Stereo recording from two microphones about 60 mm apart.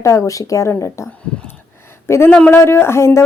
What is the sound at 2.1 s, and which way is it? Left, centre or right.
Speech, left.